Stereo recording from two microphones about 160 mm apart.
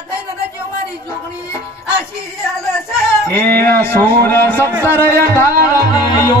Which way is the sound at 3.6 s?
15° left (ahead or behind).